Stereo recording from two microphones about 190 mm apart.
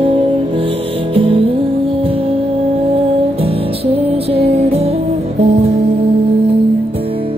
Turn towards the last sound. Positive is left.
turn(degrees=-35)  # may be behind; listen again after turning